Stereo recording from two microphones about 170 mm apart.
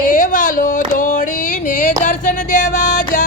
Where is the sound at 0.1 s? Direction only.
50° left (ahead or behind).